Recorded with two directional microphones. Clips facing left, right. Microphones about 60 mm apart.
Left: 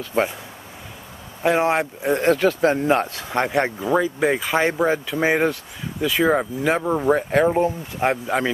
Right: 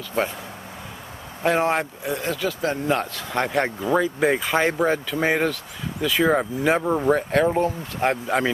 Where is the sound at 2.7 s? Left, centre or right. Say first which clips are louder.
Left 4 dB; centre.